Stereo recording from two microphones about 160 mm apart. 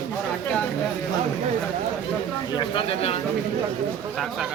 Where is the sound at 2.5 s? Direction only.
35° left (ahead or behind).